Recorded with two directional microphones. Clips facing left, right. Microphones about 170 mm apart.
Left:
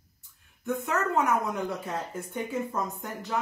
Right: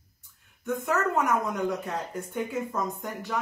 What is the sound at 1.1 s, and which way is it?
Speech, centre (ahead or behind).